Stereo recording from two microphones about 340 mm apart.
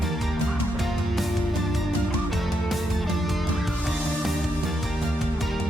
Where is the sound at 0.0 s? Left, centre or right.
Centre.